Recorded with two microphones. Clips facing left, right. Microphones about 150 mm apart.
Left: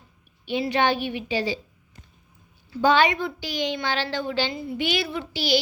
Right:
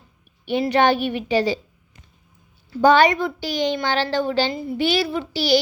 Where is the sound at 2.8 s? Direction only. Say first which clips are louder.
Right 5 dB; 40° right (ahead or behind).